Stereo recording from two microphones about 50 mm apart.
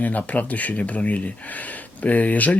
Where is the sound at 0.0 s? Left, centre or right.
Left.